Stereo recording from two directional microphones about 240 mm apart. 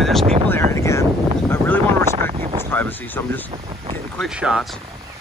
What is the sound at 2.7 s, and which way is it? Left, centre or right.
Speech, centre.